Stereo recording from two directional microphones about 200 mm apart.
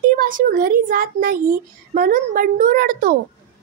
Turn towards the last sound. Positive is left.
turn(degrees=-45)  # may be behind; listen again after turning